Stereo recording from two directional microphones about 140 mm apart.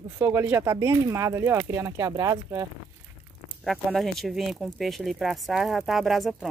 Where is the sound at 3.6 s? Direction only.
Centre (ahead or behind).